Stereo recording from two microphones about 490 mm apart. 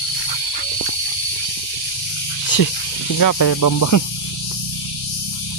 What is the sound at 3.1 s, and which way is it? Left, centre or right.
Speech, left.